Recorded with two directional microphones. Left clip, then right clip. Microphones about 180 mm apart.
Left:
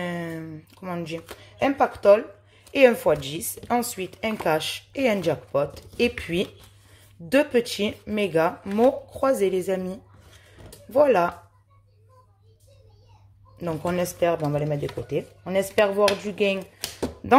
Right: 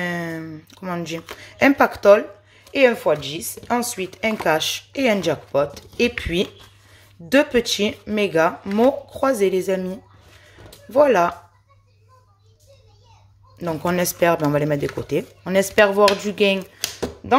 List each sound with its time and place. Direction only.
0.0 s a sound: 10° right (ahead or behind)
1.4 s speech: 20° right (ahead or behind); by 9.9 s centre (ahead or behind)
10.5 s music: 5° right (ahead or behind)
13.6 s speech: 5° right (ahead or behind)
13.9 s speech: 20° right (ahead or behind)